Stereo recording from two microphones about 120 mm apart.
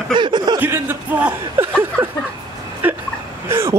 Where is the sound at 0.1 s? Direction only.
40° right (ahead or behind).